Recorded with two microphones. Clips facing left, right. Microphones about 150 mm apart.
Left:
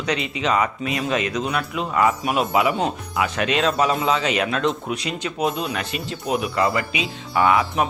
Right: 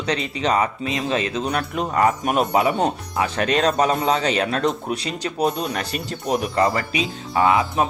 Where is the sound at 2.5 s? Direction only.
30° right (ahead or behind).